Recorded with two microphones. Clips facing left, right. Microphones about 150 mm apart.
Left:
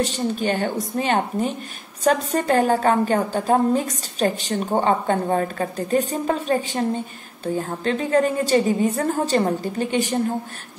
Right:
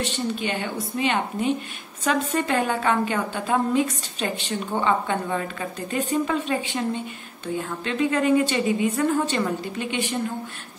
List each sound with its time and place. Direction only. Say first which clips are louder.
0.0 s a woman's voice: left 4 dB; 40° left (ahead or behind)